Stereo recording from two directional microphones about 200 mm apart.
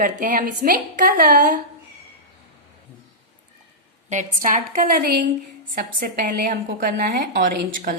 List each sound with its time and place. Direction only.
0.0 s a woman's voice: 40° right (ahead or behind)
4.1 s a woman's voice: 40° right (ahead or behind)